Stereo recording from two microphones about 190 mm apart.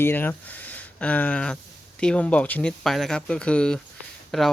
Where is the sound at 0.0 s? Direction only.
10° left (ahead or behind).